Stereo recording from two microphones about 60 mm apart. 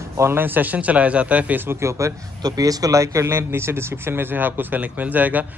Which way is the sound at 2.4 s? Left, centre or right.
Right.